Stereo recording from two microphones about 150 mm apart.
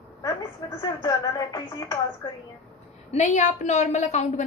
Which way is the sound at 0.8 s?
25° left (ahead or behind).